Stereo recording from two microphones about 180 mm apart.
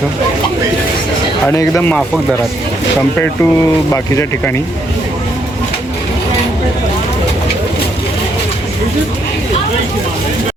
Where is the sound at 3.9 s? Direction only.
15° left (ahead or behind).